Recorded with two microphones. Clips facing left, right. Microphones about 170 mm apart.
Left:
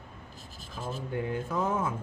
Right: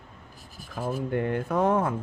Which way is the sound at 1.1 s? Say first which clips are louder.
Right 4 dB; 65° right (ahead or behind).